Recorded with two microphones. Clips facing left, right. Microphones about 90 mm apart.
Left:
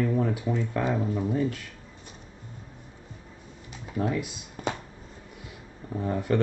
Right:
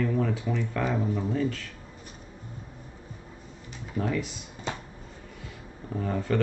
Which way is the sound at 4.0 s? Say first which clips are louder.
Left 1 dB; 15° left (ahead or behind).